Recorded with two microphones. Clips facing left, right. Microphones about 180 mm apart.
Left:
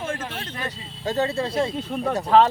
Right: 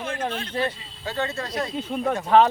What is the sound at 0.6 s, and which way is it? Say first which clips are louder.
Speech: left 2 dB; 40° left (ahead or behind).